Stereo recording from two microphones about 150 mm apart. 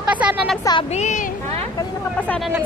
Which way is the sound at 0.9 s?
50° left (ahead or behind).